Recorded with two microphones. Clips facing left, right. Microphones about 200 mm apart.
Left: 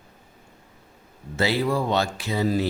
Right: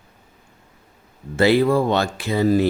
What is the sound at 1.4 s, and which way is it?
Speech, 55° right (ahead or behind).